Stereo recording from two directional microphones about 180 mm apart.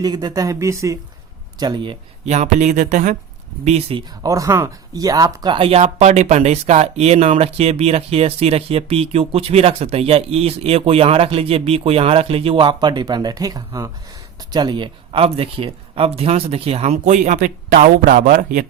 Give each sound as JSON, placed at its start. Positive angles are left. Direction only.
{"t": 0.0, "sound": "speech", "side_deg": -25}
{"t": 4.2, "sound": "speech", "side_deg": -20}